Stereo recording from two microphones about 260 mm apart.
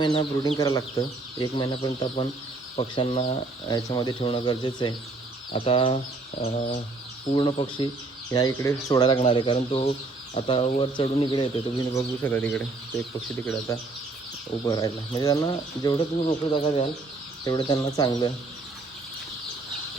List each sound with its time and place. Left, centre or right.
0.0 s speech: centre